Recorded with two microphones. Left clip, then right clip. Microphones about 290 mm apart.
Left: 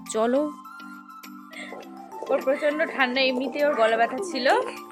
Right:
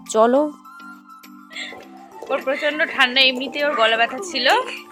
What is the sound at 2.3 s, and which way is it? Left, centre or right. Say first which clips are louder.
A woman's voice: right 2 dB; centre.